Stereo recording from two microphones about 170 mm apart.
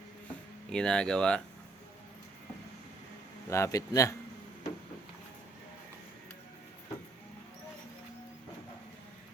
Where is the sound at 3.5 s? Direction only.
15° left (ahead or behind).